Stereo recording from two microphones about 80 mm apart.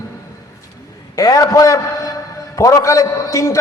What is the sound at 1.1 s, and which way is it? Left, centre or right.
A man's voice, left.